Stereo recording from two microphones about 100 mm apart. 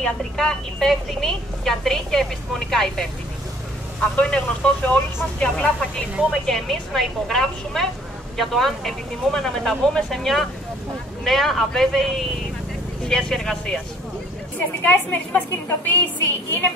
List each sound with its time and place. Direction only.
0.0 s a woman's voice: 5° left (ahead or behind)
14.9 s a woman's voice: 20° left (ahead or behind)